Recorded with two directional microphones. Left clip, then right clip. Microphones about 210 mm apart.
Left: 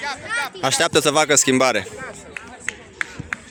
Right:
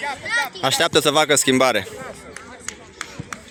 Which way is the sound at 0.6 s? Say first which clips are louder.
Left 1 dB; centre (ahead or behind).